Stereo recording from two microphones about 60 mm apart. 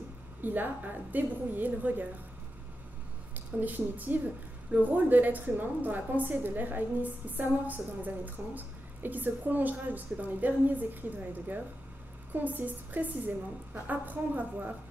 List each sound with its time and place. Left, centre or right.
0.4 s a woman's voice: right
3.3 s a woman's voice: right